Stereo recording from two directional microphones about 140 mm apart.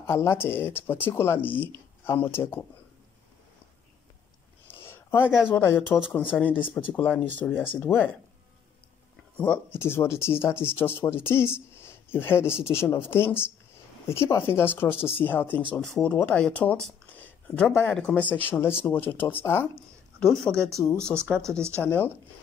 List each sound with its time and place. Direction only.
0.0 s speech: 20° left (ahead or behind)
4.6 s a sound: 15° left (ahead or behind)
5.5 s speech: 15° left (ahead or behind)
9.4 s speech: 15° left (ahead or behind)
20.2 s speech: 5° left (ahead or behind)
21.3 s speech: 20° right (ahead or behind)
21.8 s speech: 15° left (ahead or behind)